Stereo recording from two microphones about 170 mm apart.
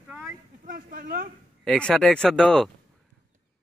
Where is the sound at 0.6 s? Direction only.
55° right (ahead or behind).